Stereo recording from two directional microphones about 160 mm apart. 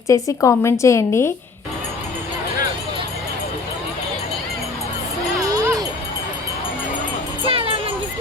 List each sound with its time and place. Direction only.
0.1 s a woman's voice: 20° left (ahead or behind)
5.4 s a sound: 20° right (ahead or behind)
7.4 s music: 35° right (ahead or behind)